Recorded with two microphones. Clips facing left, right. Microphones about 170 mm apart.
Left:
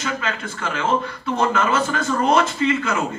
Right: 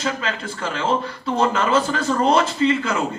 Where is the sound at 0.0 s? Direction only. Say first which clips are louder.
Right 1 dB; 30° right (ahead or behind).